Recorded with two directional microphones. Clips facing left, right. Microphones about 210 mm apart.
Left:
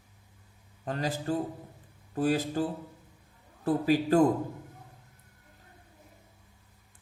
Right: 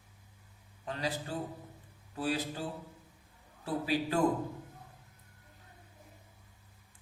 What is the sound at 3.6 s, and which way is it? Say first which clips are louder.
Speech: left 7 dB; 45° left (ahead or behind).